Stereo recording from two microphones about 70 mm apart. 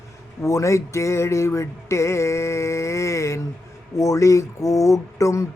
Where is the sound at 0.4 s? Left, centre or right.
Left.